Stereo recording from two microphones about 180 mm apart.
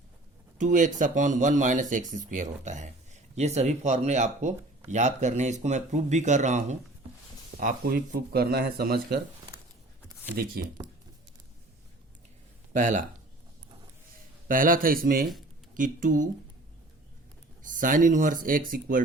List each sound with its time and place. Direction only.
0.6 s speech: 45° right (ahead or behind); by 9.2 s 60° right (ahead or behind)
10.3 s speech: 55° right (ahead or behind)
12.7 s speech: 45° right (ahead or behind)
14.4 s speech: 50° right (ahead or behind)
17.6 s speech: 45° right (ahead or behind)